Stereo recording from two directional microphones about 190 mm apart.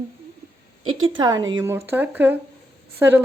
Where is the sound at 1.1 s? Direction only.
20° right (ahead or behind).